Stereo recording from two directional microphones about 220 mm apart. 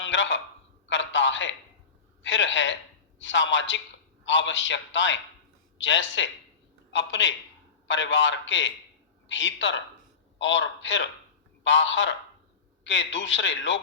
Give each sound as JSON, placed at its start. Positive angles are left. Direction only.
{"t": 0.0, "sound": "a man's voice", "side_deg": 55}
{"t": 0.9, "sound": "a sound", "side_deg": 55}
{"t": 2.2, "sound": "a man's voice", "side_deg": 55}